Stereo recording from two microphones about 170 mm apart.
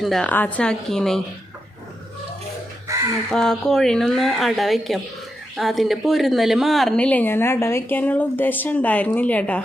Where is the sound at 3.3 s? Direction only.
5° left (ahead or behind).